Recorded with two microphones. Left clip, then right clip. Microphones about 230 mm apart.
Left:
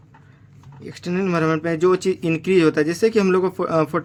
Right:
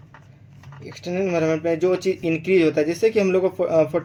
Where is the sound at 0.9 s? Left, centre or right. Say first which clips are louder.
Even; left.